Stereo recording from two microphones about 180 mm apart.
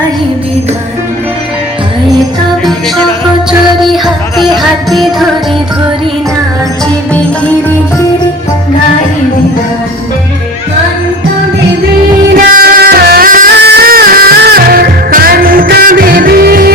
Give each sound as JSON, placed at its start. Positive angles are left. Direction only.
{"t": 3.8, "sound": "music", "side_deg": 0}
{"t": 12.3, "sound": "music", "side_deg": -55}
{"t": 13.6, "sound": "music", "side_deg": -65}